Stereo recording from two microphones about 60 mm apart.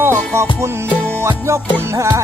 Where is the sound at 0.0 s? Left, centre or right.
Right.